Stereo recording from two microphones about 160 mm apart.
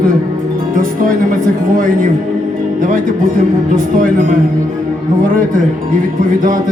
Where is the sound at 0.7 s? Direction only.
60° right (ahead or behind).